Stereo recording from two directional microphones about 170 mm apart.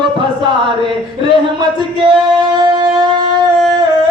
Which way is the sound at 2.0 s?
25° right (ahead or behind).